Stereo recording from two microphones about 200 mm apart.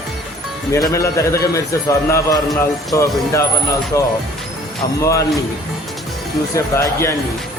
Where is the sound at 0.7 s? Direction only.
15° left (ahead or behind).